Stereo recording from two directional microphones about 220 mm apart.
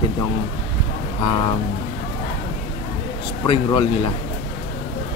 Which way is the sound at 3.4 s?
25° left (ahead or behind).